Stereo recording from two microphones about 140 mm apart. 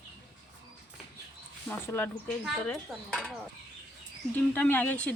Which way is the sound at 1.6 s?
15° left (ahead or behind).